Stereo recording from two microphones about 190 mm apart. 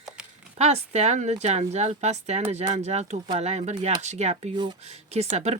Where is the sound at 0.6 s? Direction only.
35° right (ahead or behind).